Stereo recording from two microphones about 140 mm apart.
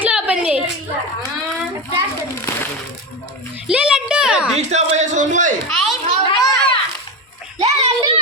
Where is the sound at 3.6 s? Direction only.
10° right (ahead or behind).